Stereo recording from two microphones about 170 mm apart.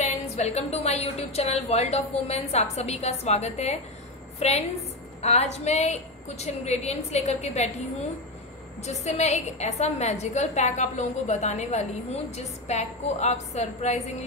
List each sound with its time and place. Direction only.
0.0 s a woman's voice: 40° left (ahead or behind)
8.8 s a woman's voice: 40° left (ahead or behind)